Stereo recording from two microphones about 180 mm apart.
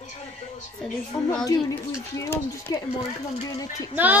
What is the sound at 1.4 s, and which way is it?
Speech, 20° left (ahead or behind).